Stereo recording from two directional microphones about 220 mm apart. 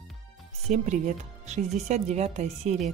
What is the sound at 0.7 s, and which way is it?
Speech, 30° right (ahead or behind).